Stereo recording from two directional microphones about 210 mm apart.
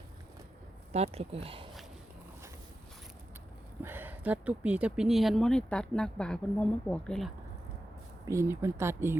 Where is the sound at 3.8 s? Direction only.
10° right (ahead or behind).